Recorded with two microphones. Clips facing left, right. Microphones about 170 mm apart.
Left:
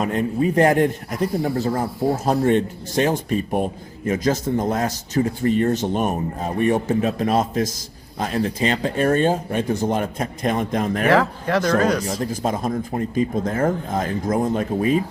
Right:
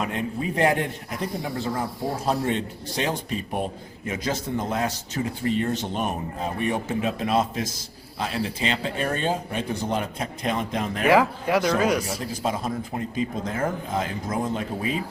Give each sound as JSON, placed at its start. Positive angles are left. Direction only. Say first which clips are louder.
{"t": 0.0, "sound": "a man's voice", "louder": "left 7 dB", "side_deg": 45}
{"t": 1.8, "sound": "speech", "louder": "left 7 dB", "side_deg": 25}
{"t": 2.2, "sound": "a man's voice", "louder": "left 6 dB", "side_deg": 50}
{"t": 11.1, "sound": "speech", "louder": "right 1 dB", "side_deg": -10}
{"t": 12.2, "sound": "a man's voice", "louder": "left 4 dB", "side_deg": 45}